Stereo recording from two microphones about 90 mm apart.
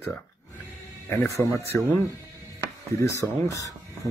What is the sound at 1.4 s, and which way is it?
Speech, 30° left (ahead or behind).